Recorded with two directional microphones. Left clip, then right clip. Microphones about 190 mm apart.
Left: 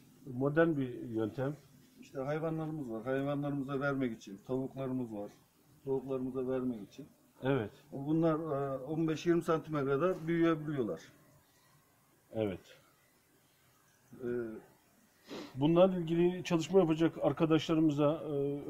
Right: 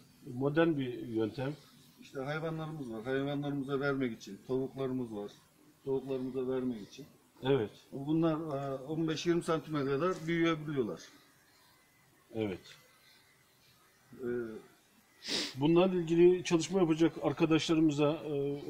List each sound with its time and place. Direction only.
0.4 s speech: 15° left (ahead or behind)
7.4 s speech: 20° left (ahead or behind)
15.2 s speech: 30° right (ahead or behind)
15.6 s speech: 25° left (ahead or behind)